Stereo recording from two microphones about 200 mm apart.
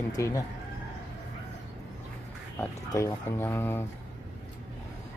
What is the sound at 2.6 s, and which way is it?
Speech, 15° left (ahead or behind).